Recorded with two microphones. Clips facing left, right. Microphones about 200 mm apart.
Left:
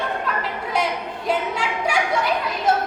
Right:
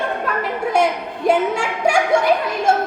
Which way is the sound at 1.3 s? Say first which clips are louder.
Right 7 dB; 50° right (ahead or behind).